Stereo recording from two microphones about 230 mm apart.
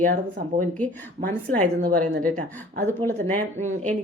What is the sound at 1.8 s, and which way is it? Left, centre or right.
Speech, right.